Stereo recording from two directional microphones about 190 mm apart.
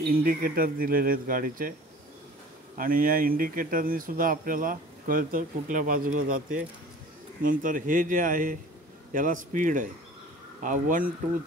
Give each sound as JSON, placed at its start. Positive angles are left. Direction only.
{"t": 0.1, "sound": "speech", "side_deg": -50}
{"t": 2.8, "sound": "speech", "side_deg": -50}